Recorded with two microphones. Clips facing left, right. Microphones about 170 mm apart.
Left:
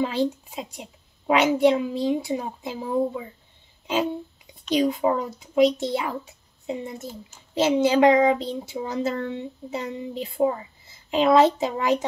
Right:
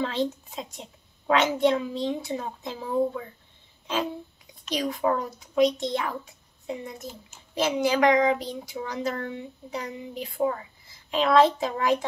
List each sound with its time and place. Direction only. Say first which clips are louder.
0.0 s a child's voice: left 3 dB; 10° left (ahead or behind)
3.8 s music: left 4 dB; 20° left (ahead or behind)
5.0 s speech: left 2 dB; 20° left (ahead or behind)
5.6 s a child's voice: left 3 dB; 5° left (ahead or behind)
6.6 s a woman's voice: left 3 dB; 20° left (ahead or behind)